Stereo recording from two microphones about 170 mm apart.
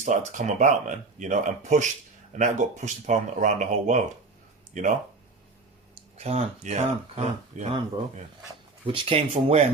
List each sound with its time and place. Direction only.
0.0 s speech: 50° right (ahead or behind)
6.1 s speech: 40° right (ahead or behind)
8.9 s speech: 30° right (ahead or behind)